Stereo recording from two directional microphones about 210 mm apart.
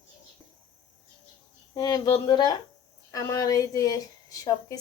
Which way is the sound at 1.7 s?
20° left (ahead or behind).